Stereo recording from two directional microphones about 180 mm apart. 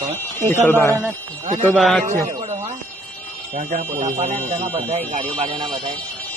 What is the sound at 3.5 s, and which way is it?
Speech, 40° right (ahead or behind).